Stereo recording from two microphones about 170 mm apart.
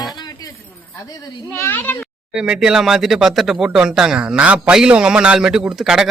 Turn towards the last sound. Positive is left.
turn(degrees=-5)  # may be behind; listen again after turning